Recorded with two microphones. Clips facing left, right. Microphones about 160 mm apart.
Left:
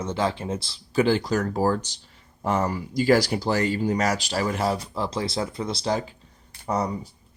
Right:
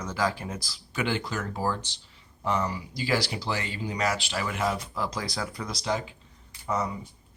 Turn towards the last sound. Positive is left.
turn(degrees=35)  # may be behind; listen again after turning